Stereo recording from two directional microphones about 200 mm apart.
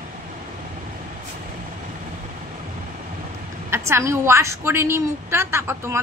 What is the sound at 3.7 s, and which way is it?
A woman's voice, 15° right (ahead or behind).